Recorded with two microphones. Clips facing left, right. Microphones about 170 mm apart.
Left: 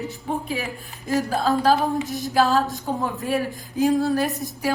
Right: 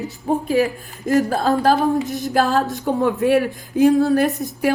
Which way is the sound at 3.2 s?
70° right (ahead or behind).